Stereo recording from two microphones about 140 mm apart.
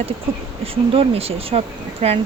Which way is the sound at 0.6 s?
45° right (ahead or behind).